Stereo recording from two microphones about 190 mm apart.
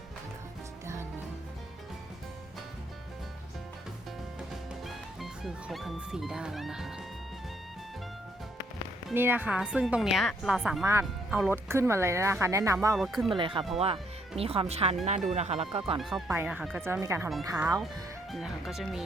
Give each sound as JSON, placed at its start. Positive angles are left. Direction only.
{"t": 4.9, "sound": "speech", "side_deg": 0}
{"t": 9.1, "sound": "a woman's voice", "side_deg": -10}
{"t": 13.0, "sound": "a woman's voice", "side_deg": 0}
{"t": 13.3, "sound": "speech", "side_deg": -25}
{"t": 16.0, "sound": "a woman's voice", "side_deg": 0}
{"t": 18.3, "sound": "a woman's voice", "side_deg": 0}